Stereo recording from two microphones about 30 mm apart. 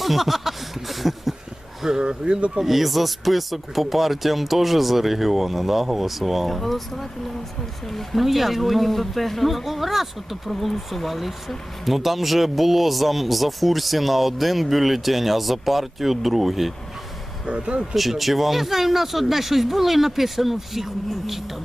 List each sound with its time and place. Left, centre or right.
0.0 s speech: centre
1.8 s speech: centre
2.0 s speech: right
2.6 s speech: centre
17.4 s speech: right
17.9 s speech: centre